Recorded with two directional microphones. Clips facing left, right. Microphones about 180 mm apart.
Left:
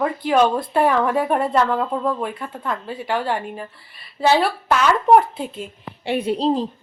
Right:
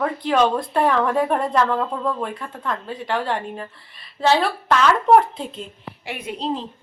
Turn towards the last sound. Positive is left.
turn(degrees=35)  # may be behind; listen again after turning